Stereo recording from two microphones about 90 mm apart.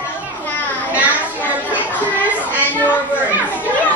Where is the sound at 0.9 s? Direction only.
15° right (ahead or behind).